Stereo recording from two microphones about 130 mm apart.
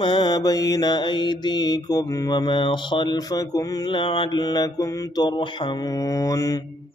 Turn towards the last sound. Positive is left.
turn(degrees=25)  # may be behind; listen again after turning